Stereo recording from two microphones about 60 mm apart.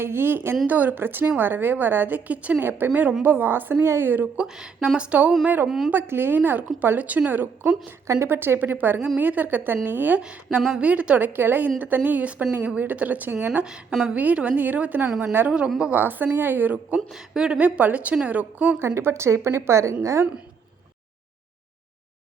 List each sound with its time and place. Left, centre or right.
0.0 s a woman's voice: right
2.6 s a woman's voice: right
4.4 s a woman's voice: centre
4.9 s a woman's voice: right
5.6 s a woman's voice: centre
5.9 s a woman's voice: right
8.0 s a woman's voice: right
8.3 s a woman's voice: right
10.2 s a woman's voice: centre
11.3 s a woman's voice: right
17.1 s a woman's voice: centre; by 18.8 s right
18.8 s a woman's voice: right